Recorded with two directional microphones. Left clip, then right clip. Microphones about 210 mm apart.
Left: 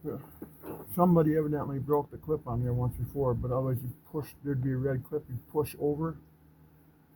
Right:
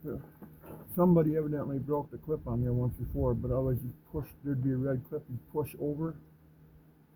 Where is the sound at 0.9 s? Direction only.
30° left (ahead or behind).